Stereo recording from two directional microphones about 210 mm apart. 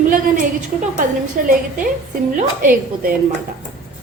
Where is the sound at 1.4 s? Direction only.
40° right (ahead or behind).